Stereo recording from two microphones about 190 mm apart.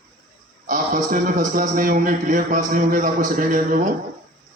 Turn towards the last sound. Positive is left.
turn(degrees=-45)  # may be behind; listen again after turning